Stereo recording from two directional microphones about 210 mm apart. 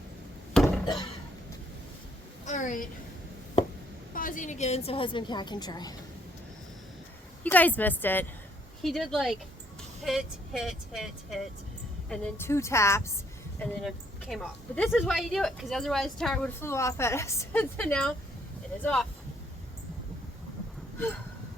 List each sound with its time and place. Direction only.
0.6 s a sound: 5° left (ahead or behind)
2.4 s a sound: 35° left (ahead or behind)
4.1 s a woman's voice: 40° left (ahead or behind); by 5.9 s 20° left (ahead or behind)
7.4 s a woman's voice: 10° left (ahead or behind)
12.5 s a woman's voice: 15° left (ahead or behind)
13.7 s a woman's voice: centre (ahead or behind)